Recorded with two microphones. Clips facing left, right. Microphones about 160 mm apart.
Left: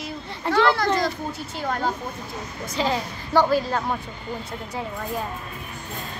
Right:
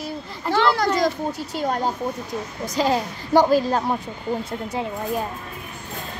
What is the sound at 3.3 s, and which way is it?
Speech, 15° right (ahead or behind).